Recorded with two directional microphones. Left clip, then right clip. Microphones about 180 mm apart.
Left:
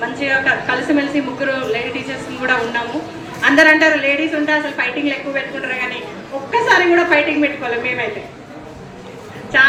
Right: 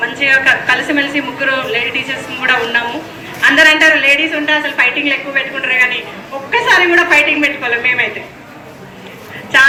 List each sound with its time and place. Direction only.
0.2 s a woman's voice: 55° left (ahead or behind)